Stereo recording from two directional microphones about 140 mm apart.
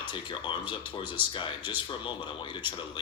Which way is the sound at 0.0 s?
35° left (ahead or behind).